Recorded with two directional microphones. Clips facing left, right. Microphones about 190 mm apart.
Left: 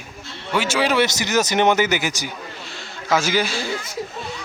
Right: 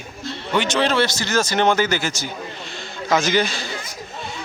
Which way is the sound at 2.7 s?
5° left (ahead or behind).